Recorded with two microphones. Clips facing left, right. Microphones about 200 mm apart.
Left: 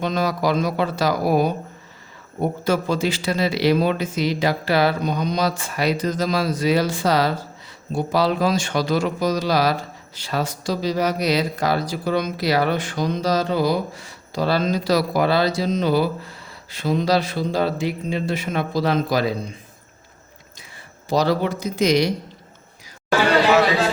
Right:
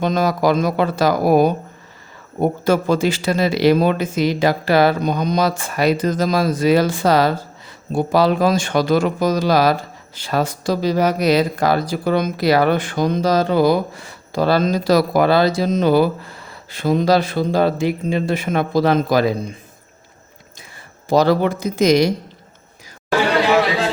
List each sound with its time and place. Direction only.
0.0 s speech: 45° right (ahead or behind)
21.1 s speech: 55° right (ahead or behind)